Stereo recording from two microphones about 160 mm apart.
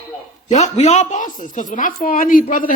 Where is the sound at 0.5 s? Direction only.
45° left (ahead or behind).